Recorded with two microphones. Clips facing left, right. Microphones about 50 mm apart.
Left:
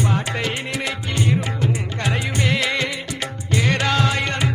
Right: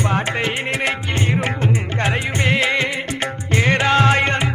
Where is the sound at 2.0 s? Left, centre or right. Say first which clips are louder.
Right 1 dB; right.